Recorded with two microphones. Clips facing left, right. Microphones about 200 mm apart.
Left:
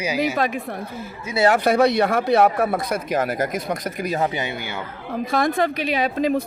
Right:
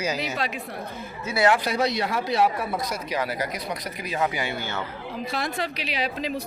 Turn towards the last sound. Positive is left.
turn(degrees=50)  # may be behind; listen again after turning